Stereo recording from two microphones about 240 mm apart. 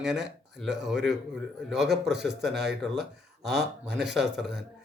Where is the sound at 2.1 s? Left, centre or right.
Right.